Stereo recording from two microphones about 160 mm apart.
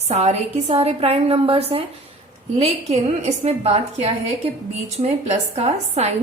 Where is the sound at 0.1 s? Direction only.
45° right (ahead or behind).